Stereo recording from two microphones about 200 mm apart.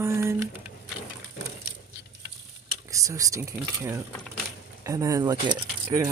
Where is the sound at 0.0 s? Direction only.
15° right (ahead or behind).